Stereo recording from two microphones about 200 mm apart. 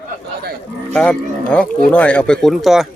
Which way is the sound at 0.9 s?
5° left (ahead or behind).